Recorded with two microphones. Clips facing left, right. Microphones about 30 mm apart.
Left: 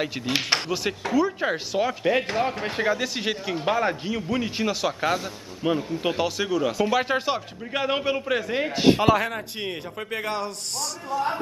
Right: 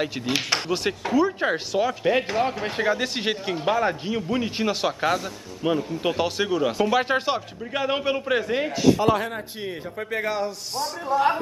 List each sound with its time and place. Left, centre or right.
0.0 s speech: centre
3.0 s speech: centre
3.5 s speech: centre
6.2 s speech: centre
7.7 s a man's voice: centre
8.0 s speech: centre
8.7 s a man's voice: left
9.0 s a man's voice: left
11.1 s speech: right